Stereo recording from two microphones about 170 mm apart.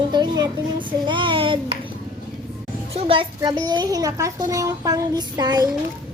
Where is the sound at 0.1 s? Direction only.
25° right (ahead or behind).